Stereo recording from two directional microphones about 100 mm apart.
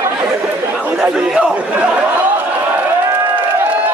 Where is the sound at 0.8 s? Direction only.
20° right (ahead or behind).